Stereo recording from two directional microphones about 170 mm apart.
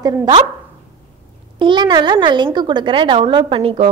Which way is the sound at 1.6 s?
25° right (ahead or behind).